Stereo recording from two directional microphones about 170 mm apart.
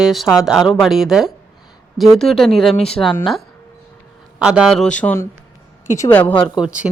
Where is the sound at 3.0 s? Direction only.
10° left (ahead or behind).